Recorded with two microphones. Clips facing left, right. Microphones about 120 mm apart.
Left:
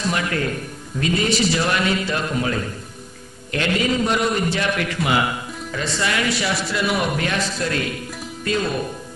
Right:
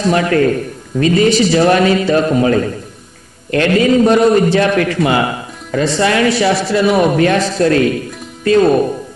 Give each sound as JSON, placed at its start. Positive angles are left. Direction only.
{"t": 0.1, "sound": "a man's voice", "side_deg": -50}
{"t": 1.0, "sound": "a man's voice", "side_deg": -40}
{"t": 7.3, "sound": "a man's voice", "side_deg": -60}